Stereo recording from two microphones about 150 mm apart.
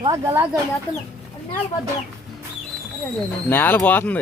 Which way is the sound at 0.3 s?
15° right (ahead or behind).